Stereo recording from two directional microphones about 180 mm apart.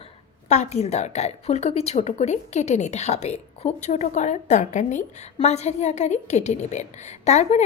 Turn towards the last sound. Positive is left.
turn(degrees=40)  # may be behind; listen again after turning